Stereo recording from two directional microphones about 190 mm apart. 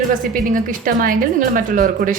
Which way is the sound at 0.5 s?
45° right (ahead or behind).